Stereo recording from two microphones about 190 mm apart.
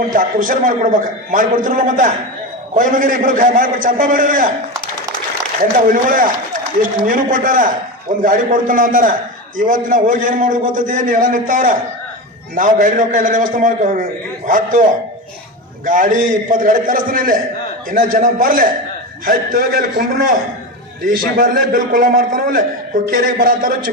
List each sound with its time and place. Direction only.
0.1 s a man's voice: 45° right (ahead or behind)
5.9 s a man's voice: 45° right (ahead or behind)
15.9 s a man's voice: 40° right (ahead or behind)